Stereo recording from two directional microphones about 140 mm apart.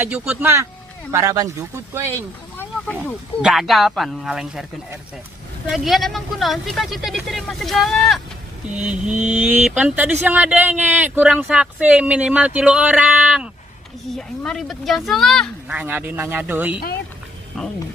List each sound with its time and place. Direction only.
0.0 s speech: 10° right (ahead or behind)
2.1 s speech: 15° left (ahead or behind)
3.4 s speech: centre (ahead or behind)
5.7 s speech: centre (ahead or behind)
14.1 s speech: 5° left (ahead or behind)
15.7 s speech: 15° right (ahead or behind)